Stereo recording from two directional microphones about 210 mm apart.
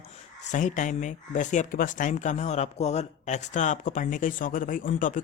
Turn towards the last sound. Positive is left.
turn(degrees=40)  # may be behind; listen again after turning